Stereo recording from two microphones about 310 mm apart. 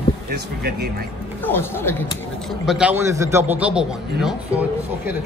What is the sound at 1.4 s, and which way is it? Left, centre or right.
A man's voice, centre.